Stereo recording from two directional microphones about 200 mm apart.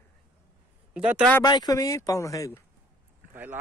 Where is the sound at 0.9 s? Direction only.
5° right (ahead or behind).